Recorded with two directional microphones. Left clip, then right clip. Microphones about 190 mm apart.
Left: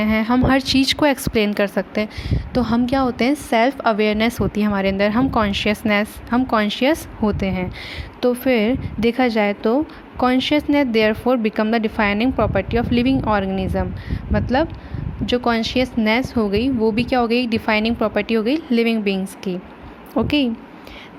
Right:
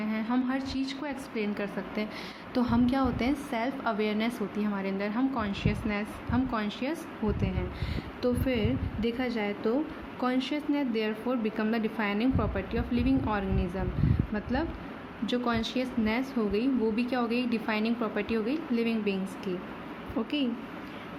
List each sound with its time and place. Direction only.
0.0 s a woman's voice: 50° left (ahead or behind)
2.3 s a woman's voice: 40° left (ahead or behind); by 7.6 s 60° left (ahead or behind)
8.2 s a woman's voice: 50° left (ahead or behind)